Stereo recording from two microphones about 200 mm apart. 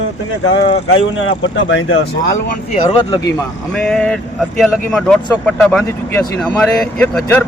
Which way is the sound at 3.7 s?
5° left (ahead or behind).